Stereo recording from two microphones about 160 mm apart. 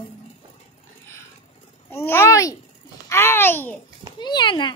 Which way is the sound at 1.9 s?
15° left (ahead or behind).